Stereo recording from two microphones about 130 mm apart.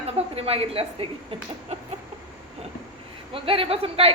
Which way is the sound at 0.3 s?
50° right (ahead or behind).